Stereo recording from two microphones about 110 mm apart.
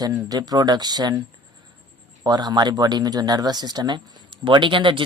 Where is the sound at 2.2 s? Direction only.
40° right (ahead or behind).